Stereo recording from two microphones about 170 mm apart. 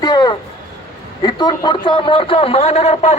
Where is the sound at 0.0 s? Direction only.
25° left (ahead or behind).